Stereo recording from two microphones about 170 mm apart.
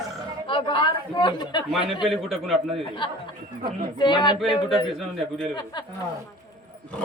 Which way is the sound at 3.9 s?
25° left (ahead or behind).